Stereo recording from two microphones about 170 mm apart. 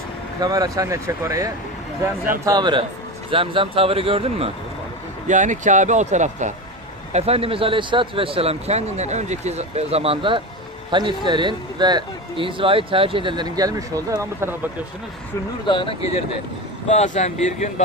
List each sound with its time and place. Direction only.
0.4 s speech: 20° right (ahead or behind)
5.3 s speech: 45° right (ahead or behind); by 14.5 s 20° right (ahead or behind)
15.6 s speech: 30° left (ahead or behind)